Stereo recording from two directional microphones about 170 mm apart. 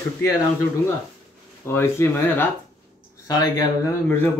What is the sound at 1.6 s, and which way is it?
A man's voice, 15° left (ahead or behind).